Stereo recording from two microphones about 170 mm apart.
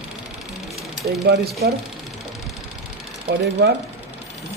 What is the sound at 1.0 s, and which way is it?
Speech, 70° right (ahead or behind).